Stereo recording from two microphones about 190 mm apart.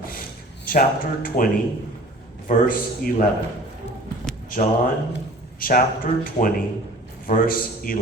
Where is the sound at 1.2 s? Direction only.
45° left (ahead or behind).